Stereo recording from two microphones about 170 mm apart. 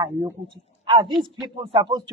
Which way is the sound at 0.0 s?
20° right (ahead or behind).